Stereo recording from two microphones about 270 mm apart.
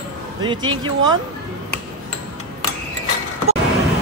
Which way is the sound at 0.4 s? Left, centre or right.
Centre.